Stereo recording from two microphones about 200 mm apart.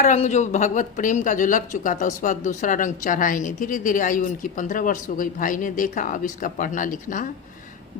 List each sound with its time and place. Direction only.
0.0 s speech: 35° left (ahead or behind)